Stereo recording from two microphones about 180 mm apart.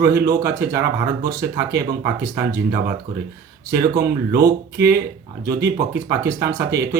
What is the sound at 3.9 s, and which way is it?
Speech, 60° right (ahead or behind).